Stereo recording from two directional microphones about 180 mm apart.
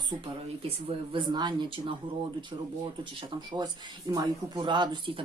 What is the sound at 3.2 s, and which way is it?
Speech, 25° right (ahead or behind).